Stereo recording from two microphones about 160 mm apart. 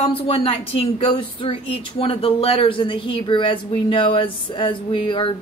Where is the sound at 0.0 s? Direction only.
35° left (ahead or behind).